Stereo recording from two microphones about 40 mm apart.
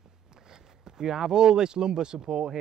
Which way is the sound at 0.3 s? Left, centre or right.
Centre.